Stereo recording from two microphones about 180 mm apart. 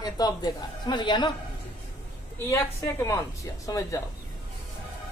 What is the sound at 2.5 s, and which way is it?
A woman's voice, 15° left (ahead or behind).